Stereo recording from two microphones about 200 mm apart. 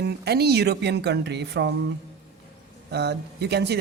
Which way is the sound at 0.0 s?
55° right (ahead or behind).